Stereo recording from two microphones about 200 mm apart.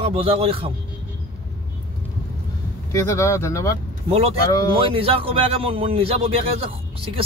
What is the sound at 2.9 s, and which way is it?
Speech, 15° left (ahead or behind).